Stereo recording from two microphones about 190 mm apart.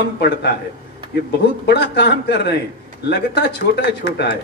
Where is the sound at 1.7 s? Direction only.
60° left (ahead or behind).